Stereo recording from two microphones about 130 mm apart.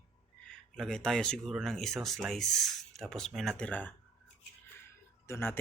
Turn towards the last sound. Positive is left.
turn(degrees=15)  # may be behind; listen again after turning